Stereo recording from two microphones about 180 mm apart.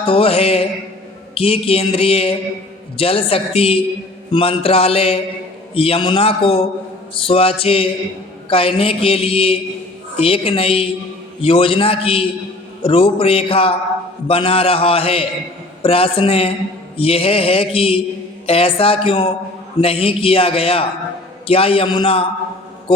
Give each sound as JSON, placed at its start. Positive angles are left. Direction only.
{"t": 0.0, "sound": "speech", "side_deg": 35}